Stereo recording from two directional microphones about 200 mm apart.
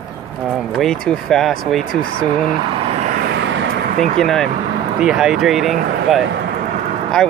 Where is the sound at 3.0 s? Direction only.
40° right (ahead or behind).